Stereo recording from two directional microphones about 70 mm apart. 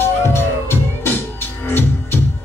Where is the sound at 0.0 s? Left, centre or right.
Left.